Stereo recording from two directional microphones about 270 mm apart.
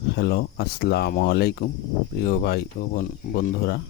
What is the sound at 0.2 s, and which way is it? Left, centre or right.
Speech, left.